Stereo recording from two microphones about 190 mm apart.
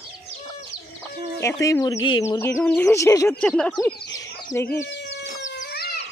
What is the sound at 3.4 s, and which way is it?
Speech, 5° left (ahead or behind).